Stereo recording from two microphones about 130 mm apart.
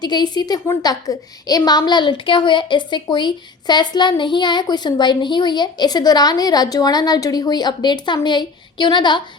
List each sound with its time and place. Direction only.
0.0 s a woman's voice: 35° left (ahead or behind)